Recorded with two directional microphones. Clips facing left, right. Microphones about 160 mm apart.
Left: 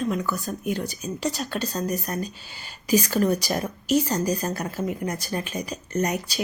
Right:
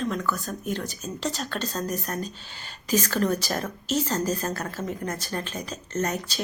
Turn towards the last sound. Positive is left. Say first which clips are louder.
# left 2 dB
turn(degrees=10)  # may be behind; listen again after turning